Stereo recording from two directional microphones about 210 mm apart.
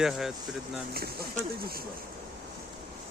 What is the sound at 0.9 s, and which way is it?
Speech, 45° right (ahead or behind).